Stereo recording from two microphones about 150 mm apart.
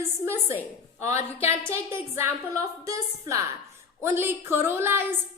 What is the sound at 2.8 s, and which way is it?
A woman's voice, 20° right (ahead or behind).